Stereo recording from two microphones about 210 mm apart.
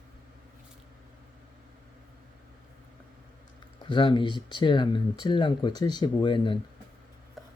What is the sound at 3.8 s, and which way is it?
Speech, 25° left (ahead or behind).